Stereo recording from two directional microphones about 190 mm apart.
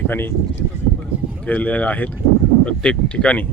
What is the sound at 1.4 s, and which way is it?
Speech, 10° left (ahead or behind).